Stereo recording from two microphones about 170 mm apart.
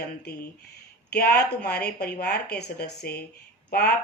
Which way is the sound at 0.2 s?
75° left (ahead or behind).